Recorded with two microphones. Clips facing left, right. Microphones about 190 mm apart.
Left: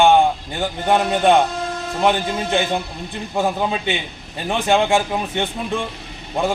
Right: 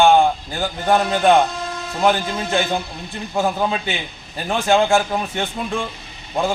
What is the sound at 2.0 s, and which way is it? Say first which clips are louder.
A man's voice: even; centre (ahead or behind).